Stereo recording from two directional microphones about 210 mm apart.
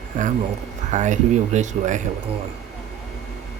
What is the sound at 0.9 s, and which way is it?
Speech, 35° right (ahead or behind).